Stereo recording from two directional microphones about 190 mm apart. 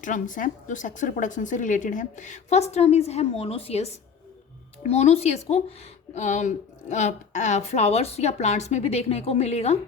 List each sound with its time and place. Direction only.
0.0 s a woman's voice: 45° left (ahead or behind)